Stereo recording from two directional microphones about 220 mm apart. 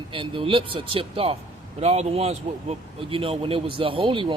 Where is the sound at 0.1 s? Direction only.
25° right (ahead or behind).